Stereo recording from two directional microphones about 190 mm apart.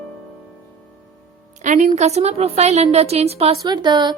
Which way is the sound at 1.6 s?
40° right (ahead or behind).